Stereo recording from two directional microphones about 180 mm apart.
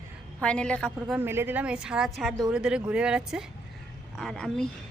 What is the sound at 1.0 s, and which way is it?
A woman's voice, 10° right (ahead or behind).